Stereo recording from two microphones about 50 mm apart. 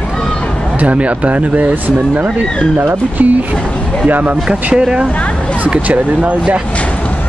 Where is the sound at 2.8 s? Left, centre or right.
Right.